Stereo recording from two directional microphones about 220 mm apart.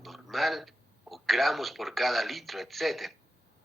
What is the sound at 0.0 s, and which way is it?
Speech, centre (ahead or behind).